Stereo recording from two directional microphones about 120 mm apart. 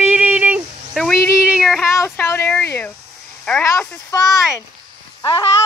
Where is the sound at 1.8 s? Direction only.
20° left (ahead or behind).